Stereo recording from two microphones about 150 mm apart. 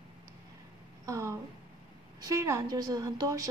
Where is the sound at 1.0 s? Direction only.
20° right (ahead or behind).